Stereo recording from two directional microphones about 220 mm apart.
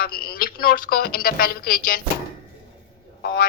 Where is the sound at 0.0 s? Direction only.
45° left (ahead or behind).